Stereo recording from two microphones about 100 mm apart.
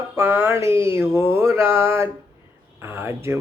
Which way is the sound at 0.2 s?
25° right (ahead or behind).